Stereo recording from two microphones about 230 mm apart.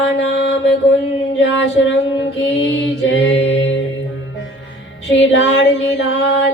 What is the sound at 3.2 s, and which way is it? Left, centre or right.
Mantra, left.